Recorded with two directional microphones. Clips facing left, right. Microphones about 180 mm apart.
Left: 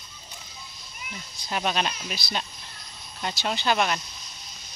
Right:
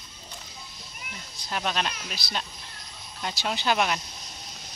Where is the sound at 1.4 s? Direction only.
5° left (ahead or behind).